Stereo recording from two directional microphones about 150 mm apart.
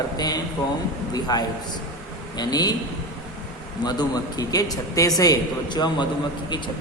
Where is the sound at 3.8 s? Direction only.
25° left (ahead or behind).